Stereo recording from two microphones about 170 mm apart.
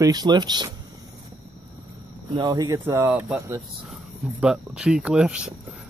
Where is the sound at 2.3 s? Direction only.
25° right (ahead or behind).